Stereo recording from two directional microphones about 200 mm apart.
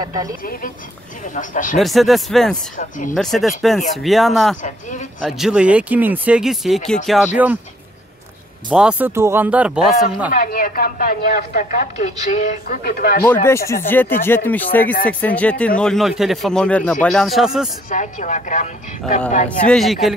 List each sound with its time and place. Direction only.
0.0 s speech: 20° right (ahead or behind)
1.3 s speech: 40° left (ahead or behind)
1.8 s speech: centre (ahead or behind)
8.6 s speech: 5° right (ahead or behind)
10.3 s speech: 45° left (ahead or behind)
13.5 s speech: 15° left (ahead or behind); by 17.6 s centre (ahead or behind)
17.8 s speech: 40° left (ahead or behind)
19.6 s speech: centre (ahead or behind)